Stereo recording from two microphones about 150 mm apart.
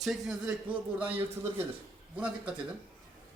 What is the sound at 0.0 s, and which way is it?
A man's voice, centre (ahead or behind).